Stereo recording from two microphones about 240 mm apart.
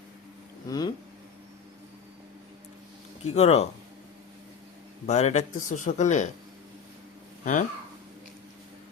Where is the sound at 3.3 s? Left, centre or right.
Left.